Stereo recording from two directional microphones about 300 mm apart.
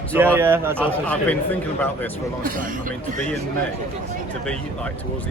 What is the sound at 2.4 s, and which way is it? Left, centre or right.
Speech, right.